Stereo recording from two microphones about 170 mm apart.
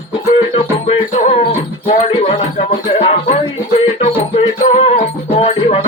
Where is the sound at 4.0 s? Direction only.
35° left (ahead or behind).